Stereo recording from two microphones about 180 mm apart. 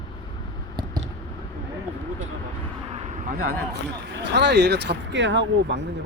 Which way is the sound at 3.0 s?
45° right (ahead or behind).